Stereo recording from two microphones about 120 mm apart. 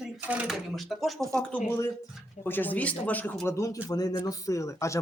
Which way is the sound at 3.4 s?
25° left (ahead or behind).